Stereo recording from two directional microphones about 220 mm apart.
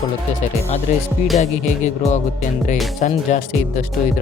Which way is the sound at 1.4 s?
30° left (ahead or behind).